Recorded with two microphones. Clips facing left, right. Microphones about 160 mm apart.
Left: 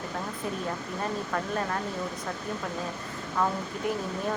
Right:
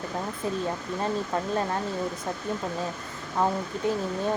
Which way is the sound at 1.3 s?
25° right (ahead or behind).